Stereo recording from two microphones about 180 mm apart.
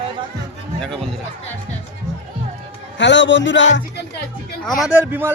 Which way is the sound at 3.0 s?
80° left.